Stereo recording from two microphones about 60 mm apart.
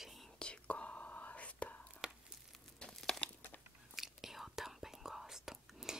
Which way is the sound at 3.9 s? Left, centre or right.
Centre.